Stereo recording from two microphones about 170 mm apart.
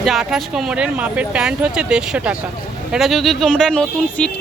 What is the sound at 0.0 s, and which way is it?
Speech, centre (ahead or behind).